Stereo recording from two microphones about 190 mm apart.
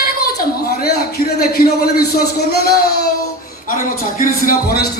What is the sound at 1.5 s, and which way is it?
Speech, 50° left (ahead or behind).